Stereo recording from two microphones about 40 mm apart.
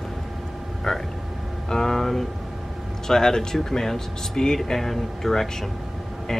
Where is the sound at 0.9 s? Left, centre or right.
Centre.